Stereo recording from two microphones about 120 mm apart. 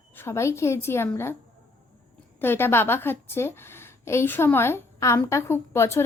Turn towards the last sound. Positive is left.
turn(degrees=20)  # may be behind; listen again after turning